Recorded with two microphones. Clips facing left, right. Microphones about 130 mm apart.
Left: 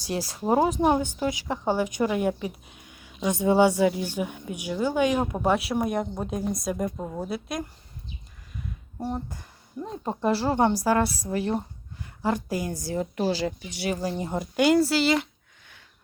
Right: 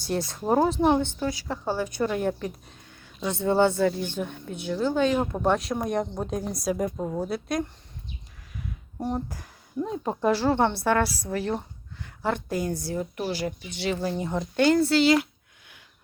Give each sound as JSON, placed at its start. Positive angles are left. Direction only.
{"t": 0.0, "sound": "speech", "side_deg": 5}
{"t": 9.1, "sound": "speech", "side_deg": -5}
{"t": 10.5, "sound": "speech", "side_deg": 10}
{"t": 11.0, "sound": "a woman's voice", "side_deg": 30}
{"t": 12.2, "sound": "speech", "side_deg": 10}
{"t": 13.0, "sound": "a woman's voice", "side_deg": 35}
{"t": 13.8, "sound": "speech", "side_deg": 10}